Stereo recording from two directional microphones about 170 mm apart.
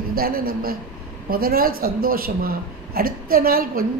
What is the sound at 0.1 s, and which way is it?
A man's voice, 60° right (ahead or behind).